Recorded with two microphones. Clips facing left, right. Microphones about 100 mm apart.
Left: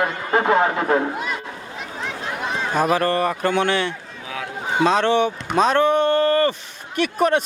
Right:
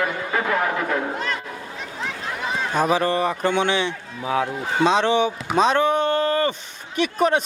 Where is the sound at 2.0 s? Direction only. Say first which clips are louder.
Left 1 dB; centre (ahead or behind).